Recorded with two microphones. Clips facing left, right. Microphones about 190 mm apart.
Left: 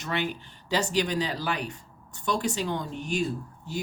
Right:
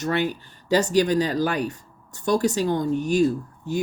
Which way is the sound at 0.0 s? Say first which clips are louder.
Right 7 dB; 45° right (ahead or behind).